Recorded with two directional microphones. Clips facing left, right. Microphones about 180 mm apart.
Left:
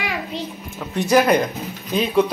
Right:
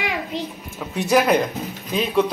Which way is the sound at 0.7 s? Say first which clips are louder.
Left 2 dB; centre (ahead or behind).